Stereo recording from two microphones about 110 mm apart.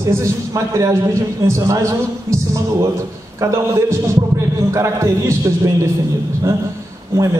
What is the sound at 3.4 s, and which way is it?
A man's voice, 25° right (ahead or behind).